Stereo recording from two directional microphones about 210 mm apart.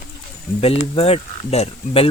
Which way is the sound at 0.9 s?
30° left (ahead or behind).